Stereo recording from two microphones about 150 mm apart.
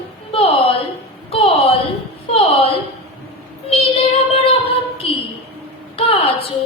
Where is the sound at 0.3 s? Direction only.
40° left (ahead or behind).